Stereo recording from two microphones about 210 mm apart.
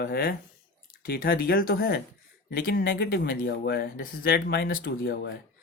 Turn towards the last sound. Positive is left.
turn(degrees=55)  # may be behind; listen again after turning